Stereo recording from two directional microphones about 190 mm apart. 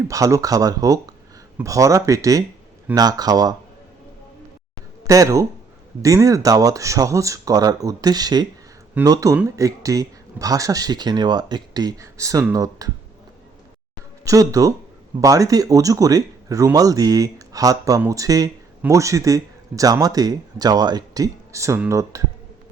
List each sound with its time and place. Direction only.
0.1 s speech: 15° right (ahead or behind)
5.0 s speech: 15° right (ahead or behind)
14.3 s speech: 15° right (ahead or behind)